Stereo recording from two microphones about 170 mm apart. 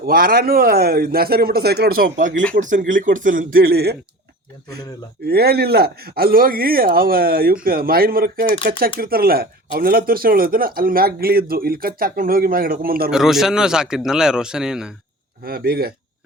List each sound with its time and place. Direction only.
0.0 s speech: 60° right (ahead or behind)
5.2 s speech: 65° right (ahead or behind)
13.1 s speech: centre (ahead or behind)
15.4 s speech: 60° right (ahead or behind)